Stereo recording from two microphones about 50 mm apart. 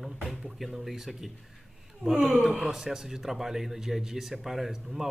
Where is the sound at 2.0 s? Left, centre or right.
Right.